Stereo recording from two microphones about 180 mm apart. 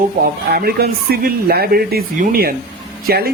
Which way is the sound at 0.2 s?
60° right (ahead or behind).